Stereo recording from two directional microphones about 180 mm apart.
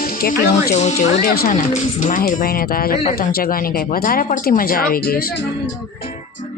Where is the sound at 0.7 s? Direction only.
40° left (ahead or behind); by 5.4 s 55° left (ahead or behind).